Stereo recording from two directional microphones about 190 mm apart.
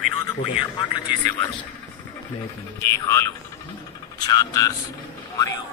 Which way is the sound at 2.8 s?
15° left (ahead or behind).